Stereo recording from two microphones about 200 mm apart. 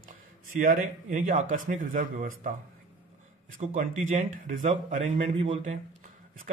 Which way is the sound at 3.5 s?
40° right (ahead or behind).